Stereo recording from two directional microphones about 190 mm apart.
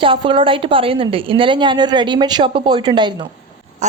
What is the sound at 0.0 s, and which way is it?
A woman's voice, 25° right (ahead or behind).